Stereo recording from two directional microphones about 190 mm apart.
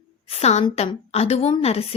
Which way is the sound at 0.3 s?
35° left (ahead or behind).